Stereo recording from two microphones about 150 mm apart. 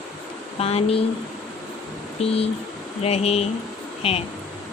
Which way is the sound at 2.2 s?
40° left (ahead or behind).